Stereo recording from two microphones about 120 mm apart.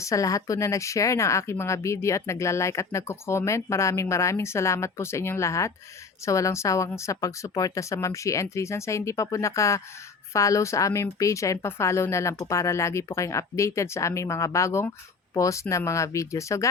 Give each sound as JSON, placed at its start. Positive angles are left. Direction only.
{"t": 0.0, "sound": "speech", "side_deg": 25}